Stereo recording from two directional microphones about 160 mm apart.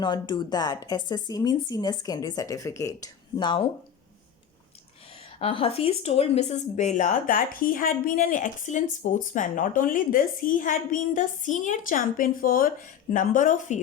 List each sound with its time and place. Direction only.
0.0 s speech: 30° left (ahead or behind)
5.4 s speech: 35° left (ahead or behind); by 13.7 s 50° left (ahead or behind)